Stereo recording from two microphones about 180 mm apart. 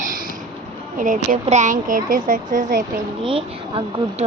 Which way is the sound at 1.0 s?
45° right (ahead or behind).